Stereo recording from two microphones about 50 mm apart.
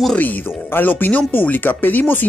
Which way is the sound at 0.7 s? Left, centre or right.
Left.